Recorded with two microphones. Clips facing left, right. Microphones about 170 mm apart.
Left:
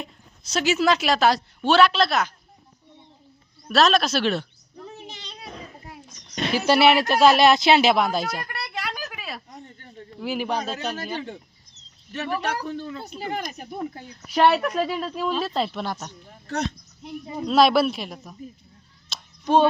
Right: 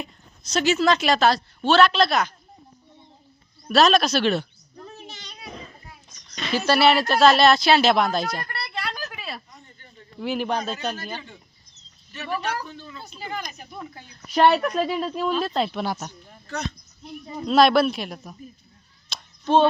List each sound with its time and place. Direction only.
0.4 s speech: 10° left (ahead or behind)
3.7 s speech: centre (ahead or behind)
5.1 s children playing: 30° left (ahead or behind)
6.5 s speech: 15° left (ahead or behind)
7.9 s a sound: 5° left (ahead or behind)
9.5 s a sound: 55° left (ahead or behind)
10.2 s speech: 5° left (ahead or behind)
11.2 s speech: 65° left (ahead or behind); by 14.0 s 50° left (ahead or behind)
14.3 s speech: 5° left (ahead or behind)
17.0 s speech: 15° left (ahead or behind)
17.4 s speech: centre (ahead or behind)
19.1 s a sound: centre (ahead or behind)
19.5 s speech: 15° left (ahead or behind)